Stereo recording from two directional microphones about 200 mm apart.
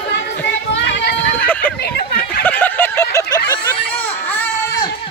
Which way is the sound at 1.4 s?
10° left (ahead or behind).